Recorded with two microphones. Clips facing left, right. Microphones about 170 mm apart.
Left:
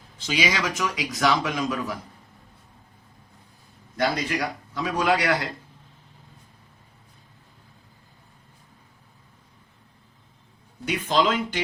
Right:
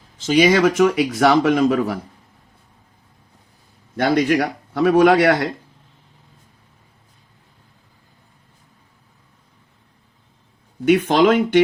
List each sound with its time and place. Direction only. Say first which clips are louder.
0.2 s speech: right 12 dB; 50° right (ahead or behind)
3.9 s speech: right 9 dB; 60° right (ahead or behind)
10.8 s speech: right 9 dB; 55° right (ahead or behind)